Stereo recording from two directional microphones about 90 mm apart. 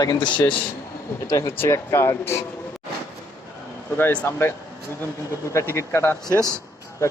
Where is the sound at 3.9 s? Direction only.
20° left (ahead or behind).